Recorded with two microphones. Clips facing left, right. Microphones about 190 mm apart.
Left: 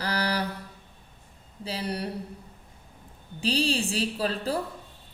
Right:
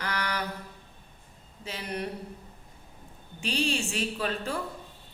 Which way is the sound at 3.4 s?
35° left (ahead or behind).